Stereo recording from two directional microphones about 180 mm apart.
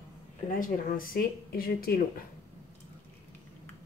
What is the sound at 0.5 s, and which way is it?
Speech, 50° left (ahead or behind).